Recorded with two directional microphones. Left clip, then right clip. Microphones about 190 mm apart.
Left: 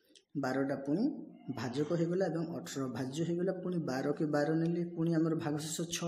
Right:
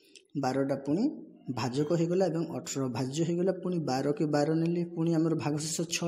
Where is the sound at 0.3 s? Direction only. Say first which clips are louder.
Right 5 dB; 25° right (ahead or behind).